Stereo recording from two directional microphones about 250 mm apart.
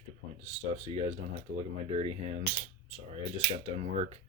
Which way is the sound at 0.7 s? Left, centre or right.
Right.